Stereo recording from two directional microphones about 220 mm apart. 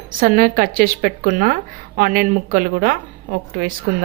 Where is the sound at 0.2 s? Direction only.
40° right (ahead or behind).